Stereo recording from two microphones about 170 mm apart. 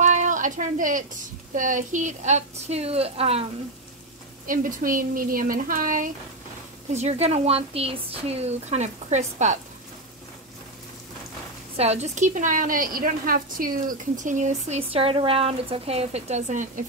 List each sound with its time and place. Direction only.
0.0 s a sound: 45° right (ahead or behind)
1.5 s speech: 50° right (ahead or behind)
4.5 s a woman's voice: 55° right (ahead or behind)
6.9 s speech: 40° right (ahead or behind)
11.7 s a woman's voice: 40° right (ahead or behind)